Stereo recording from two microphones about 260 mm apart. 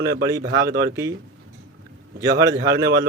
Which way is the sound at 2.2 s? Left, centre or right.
Centre.